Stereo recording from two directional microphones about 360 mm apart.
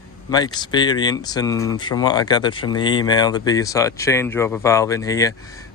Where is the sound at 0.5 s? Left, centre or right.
Centre.